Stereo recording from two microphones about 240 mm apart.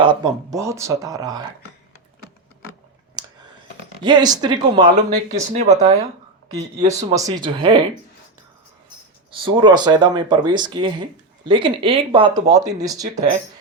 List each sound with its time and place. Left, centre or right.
0.0 s speech: centre
4.0 s speech: centre
5.3 s speech: right
5.7 s speech: centre
6.6 s speech: right
7.0 s speech: centre
9.3 s speech: centre